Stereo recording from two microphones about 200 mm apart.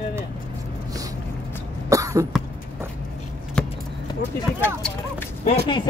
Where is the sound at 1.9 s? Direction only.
15° right (ahead or behind).